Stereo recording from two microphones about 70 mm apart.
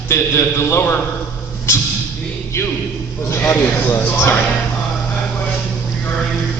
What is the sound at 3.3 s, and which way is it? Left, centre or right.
A man's voice, left.